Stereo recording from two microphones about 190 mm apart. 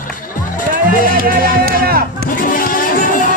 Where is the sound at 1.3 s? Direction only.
50° right (ahead or behind).